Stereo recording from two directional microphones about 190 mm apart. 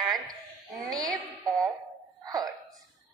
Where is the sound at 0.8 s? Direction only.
20° right (ahead or behind).